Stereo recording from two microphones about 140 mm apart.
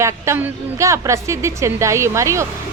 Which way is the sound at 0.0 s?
20° right (ahead or behind).